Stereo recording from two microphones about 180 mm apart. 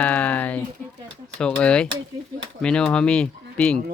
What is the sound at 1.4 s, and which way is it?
Speech, 5° left (ahead or behind).